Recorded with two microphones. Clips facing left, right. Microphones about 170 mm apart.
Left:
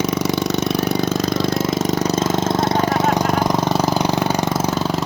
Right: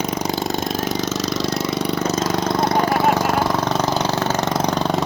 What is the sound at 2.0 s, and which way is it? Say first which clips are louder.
Vehicle: left 2 dB; 25° left (ahead or behind).